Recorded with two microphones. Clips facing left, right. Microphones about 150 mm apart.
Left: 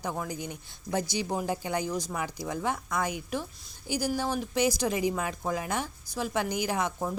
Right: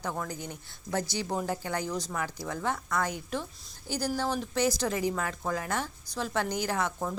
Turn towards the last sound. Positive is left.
turn(degrees=15)  # may be behind; listen again after turning